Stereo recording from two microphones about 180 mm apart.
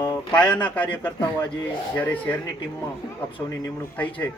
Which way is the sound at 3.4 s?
15° left (ahead or behind).